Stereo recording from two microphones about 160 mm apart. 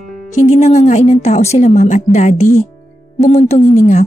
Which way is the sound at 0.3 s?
45° left (ahead or behind).